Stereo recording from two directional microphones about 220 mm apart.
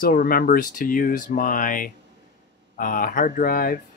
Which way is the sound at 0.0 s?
40° left (ahead or behind).